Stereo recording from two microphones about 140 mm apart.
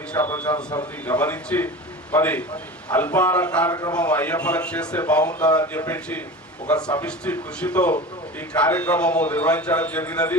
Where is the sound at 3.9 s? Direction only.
10° left (ahead or behind).